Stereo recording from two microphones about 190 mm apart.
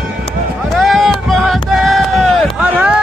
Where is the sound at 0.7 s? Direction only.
Centre (ahead or behind).